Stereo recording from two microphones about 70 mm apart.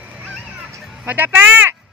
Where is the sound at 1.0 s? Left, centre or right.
Right.